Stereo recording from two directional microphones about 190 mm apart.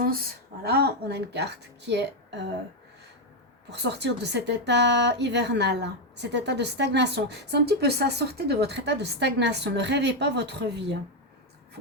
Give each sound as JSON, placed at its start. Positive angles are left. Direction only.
{"t": 0.6, "sound": "a woman's voice", "side_deg": -60}
{"t": 3.7, "sound": "a woman's voice", "side_deg": -65}